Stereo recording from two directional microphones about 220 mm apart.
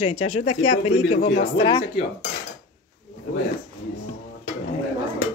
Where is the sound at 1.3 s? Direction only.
20° left (ahead or behind).